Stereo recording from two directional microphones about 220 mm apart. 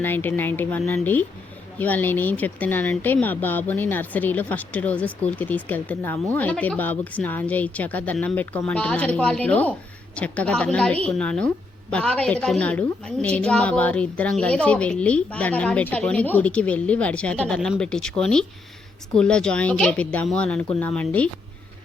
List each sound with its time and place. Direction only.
0.0 s a woman's voice: 10° left (ahead or behind)